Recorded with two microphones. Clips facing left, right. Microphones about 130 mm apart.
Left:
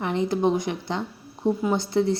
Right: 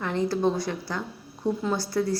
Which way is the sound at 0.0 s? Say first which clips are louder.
Left 2 dB; 20° left (ahead or behind).